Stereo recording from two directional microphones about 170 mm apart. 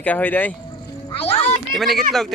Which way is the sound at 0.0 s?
10° left (ahead or behind).